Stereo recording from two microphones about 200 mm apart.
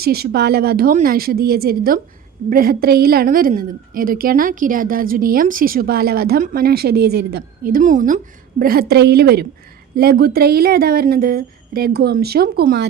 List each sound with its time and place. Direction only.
0.0 s a woman's voice: 50° right (ahead or behind)